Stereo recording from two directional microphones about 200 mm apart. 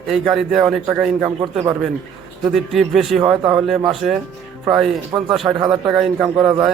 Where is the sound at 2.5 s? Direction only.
Centre (ahead or behind).